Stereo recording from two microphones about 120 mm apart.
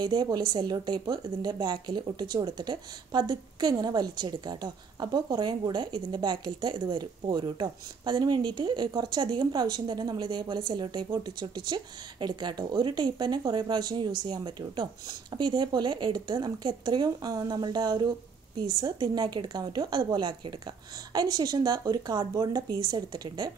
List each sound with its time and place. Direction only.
0.0 s a woman's voice: 35° right (ahead or behind)